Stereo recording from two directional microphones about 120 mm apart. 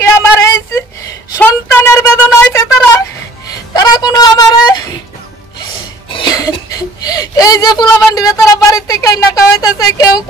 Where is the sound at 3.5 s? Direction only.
35° left (ahead or behind).